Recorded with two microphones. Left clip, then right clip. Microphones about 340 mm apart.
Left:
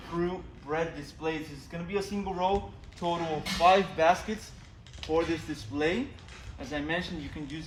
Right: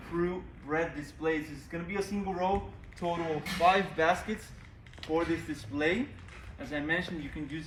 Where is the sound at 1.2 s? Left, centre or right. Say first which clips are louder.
Right 2 dB; centre.